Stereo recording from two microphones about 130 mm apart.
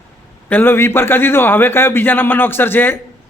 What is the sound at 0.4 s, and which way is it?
A man's voice, 15° left (ahead or behind).